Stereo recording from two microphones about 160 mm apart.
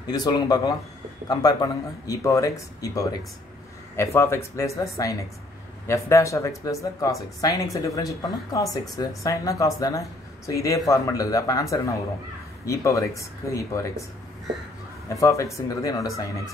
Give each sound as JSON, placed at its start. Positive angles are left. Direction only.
{"t": 0.0, "sound": "speech", "side_deg": 25}
{"t": 15.0, "sound": "speech", "side_deg": 20}